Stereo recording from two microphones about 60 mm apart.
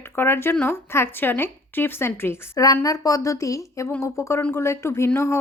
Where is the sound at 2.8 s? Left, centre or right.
Left.